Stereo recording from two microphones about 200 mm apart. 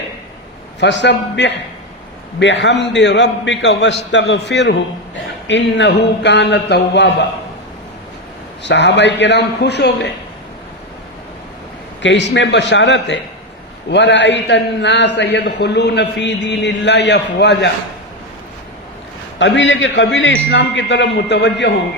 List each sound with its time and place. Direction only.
0.8 s a man's voice: 60° left (ahead or behind)
8.6 s a man's voice: 60° left (ahead or behind)
12.0 s a man's voice: 60° left (ahead or behind)
19.4 s a man's voice: 65° left (ahead or behind)